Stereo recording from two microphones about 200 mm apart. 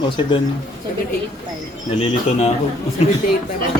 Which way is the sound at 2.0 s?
30° left (ahead or behind).